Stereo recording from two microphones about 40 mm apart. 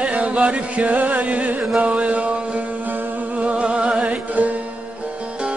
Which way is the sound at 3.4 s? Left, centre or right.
Right.